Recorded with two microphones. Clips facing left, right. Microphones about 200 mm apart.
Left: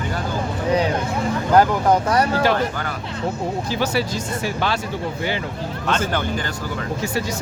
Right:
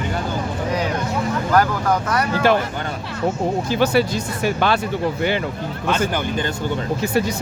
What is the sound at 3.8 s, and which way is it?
Speech, 60° right (ahead or behind).